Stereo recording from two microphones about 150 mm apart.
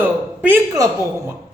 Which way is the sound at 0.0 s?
15° right (ahead or behind).